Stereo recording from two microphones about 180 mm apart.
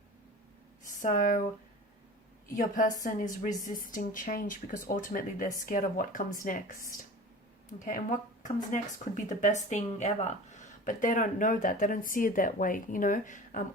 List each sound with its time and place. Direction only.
0.9 s speech: 45° left (ahead or behind)
2.6 s speech: 45° left (ahead or behind)